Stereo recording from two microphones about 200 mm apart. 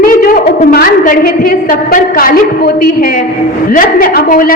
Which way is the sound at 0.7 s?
45° left (ahead or behind).